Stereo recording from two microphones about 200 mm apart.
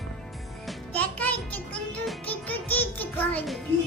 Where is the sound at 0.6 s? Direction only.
10° left (ahead or behind).